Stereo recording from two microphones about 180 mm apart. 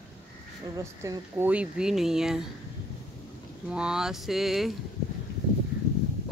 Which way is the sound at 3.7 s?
5° right (ahead or behind).